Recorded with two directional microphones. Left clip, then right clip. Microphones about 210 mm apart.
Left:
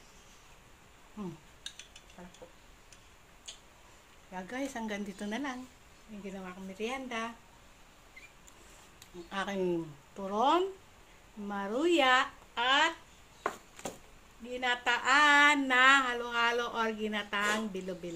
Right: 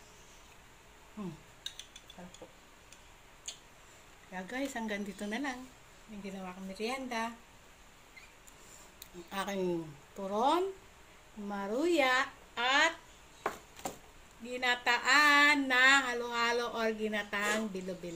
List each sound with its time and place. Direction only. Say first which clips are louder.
4.3 s a woman's voice: even; 5° left (ahead or behind)
9.3 s a woman's voice: left 2 dB; 15° left (ahead or behind)
14.5 s a woman's voice: even; 15° left (ahead or behind)